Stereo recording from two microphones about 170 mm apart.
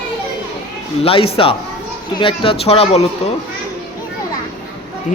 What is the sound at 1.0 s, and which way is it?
Speech, 35° left (ahead or behind).